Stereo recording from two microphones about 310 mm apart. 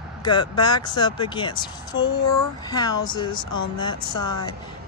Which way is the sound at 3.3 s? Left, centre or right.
Left.